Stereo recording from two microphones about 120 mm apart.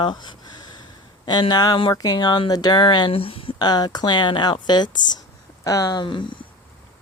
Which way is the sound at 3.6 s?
35° left (ahead or behind).